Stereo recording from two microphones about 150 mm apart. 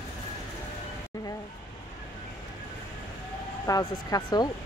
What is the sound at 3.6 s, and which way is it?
Speech, 25° left (ahead or behind).